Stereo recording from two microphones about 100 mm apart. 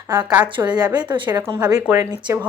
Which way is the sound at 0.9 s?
45° right (ahead or behind).